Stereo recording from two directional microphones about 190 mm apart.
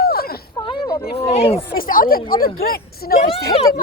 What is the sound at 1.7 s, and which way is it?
A woman's voice, 50° left (ahead or behind).